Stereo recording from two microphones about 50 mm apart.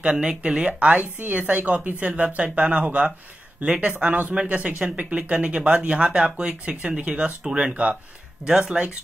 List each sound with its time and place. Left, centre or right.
0.0 s speech: centre
8.5 s speech: centre